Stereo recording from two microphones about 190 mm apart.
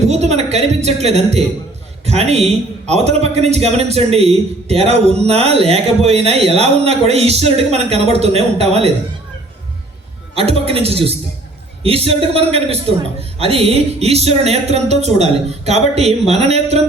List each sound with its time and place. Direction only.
0.1 s a woman's voice: 35° right (ahead or behind)
10.7 s a man's voice: 30° right (ahead or behind)